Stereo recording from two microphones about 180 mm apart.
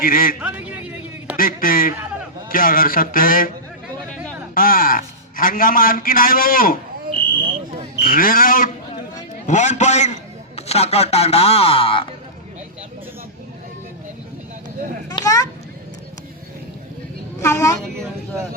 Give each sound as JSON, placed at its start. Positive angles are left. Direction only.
{"t": 0.0, "sound": "a man's voice", "side_deg": 50}
{"t": 0.3, "sound": "a sound", "side_deg": -10}
{"t": 1.4, "sound": "a man's voice", "side_deg": 50}
{"t": 4.5, "sound": "a man's voice", "side_deg": 50}
{"t": 8.0, "sound": "a man's voice", "side_deg": 50}
{"t": 15.1, "sound": "a sound", "side_deg": 20}
{"t": 17.4, "sound": "a woman's voice", "side_deg": 15}